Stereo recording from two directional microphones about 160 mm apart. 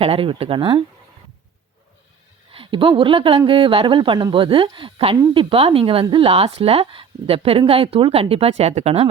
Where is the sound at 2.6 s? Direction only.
30° right (ahead or behind).